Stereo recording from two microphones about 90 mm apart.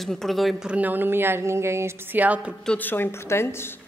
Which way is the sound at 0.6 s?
20° right (ahead or behind).